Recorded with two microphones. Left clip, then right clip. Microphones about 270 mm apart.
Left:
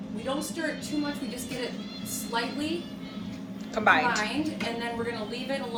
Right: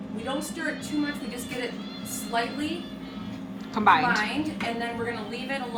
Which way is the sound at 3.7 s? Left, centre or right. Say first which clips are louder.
Right 2 dB; centre.